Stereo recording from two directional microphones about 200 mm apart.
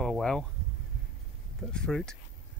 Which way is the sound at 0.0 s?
Centre (ahead or behind).